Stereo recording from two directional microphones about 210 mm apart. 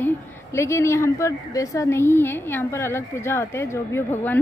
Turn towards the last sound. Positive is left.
turn(degrees=10)  # may be behind; listen again after turning